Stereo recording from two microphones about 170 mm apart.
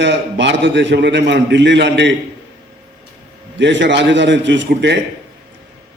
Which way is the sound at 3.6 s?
90° right.